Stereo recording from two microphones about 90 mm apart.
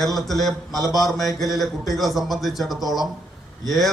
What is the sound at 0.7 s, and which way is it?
Mantra, 40° right (ahead or behind).